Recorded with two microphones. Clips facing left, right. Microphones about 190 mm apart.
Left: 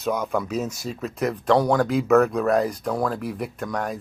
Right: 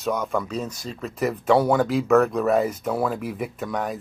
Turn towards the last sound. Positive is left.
turn(degrees=0)  # may be behind; listen again after turning